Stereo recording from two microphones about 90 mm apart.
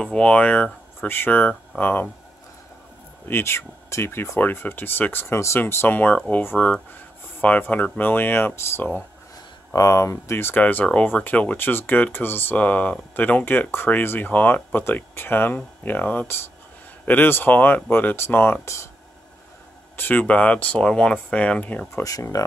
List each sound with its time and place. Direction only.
0.0 s speech: 10° left (ahead or behind)
1.0 s speech: 25° left (ahead or behind)
3.3 s speech: 25° left (ahead or behind)
9.7 s speech: 35° left (ahead or behind)
20.0 s speech: 20° left (ahead or behind)
21.9 s speech: 35° left (ahead or behind)